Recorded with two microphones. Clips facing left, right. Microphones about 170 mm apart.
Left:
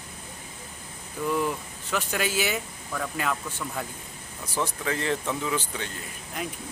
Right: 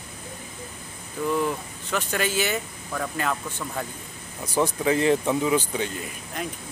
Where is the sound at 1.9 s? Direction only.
5° left (ahead or behind).